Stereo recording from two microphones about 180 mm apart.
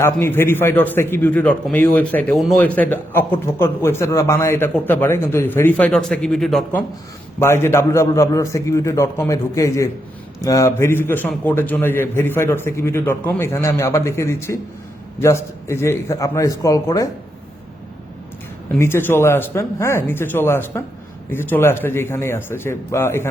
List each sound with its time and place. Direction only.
0.0 s a man's voice: 15° left (ahead or behind)
7.3 s a man's voice: 15° left (ahead or behind)
18.8 s a man's voice: 15° left (ahead or behind)